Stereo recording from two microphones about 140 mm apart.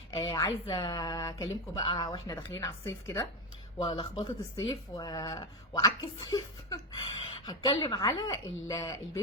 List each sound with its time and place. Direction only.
0.1 s speech: 25° left (ahead or behind)
3.9 s speech: 35° left (ahead or behind)
4.5 s speech: 25° left (ahead or behind)